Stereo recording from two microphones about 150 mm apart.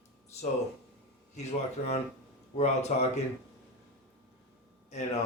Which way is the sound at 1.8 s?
45° left (ahead or behind).